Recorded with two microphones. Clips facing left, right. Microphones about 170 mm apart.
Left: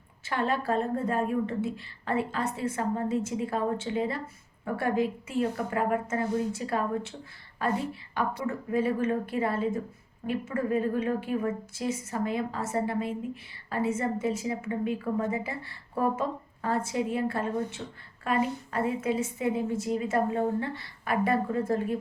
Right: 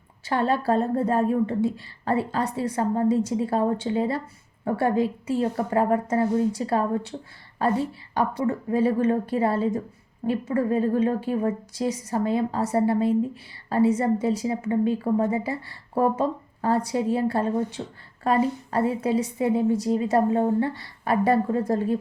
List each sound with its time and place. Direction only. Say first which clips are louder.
0.3 s a woman's voice: right 5 dB; 30° right (ahead or behind)